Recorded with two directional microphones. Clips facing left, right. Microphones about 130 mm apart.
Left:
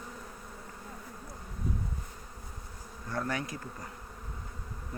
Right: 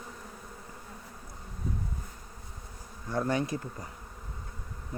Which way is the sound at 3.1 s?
20° right (ahead or behind).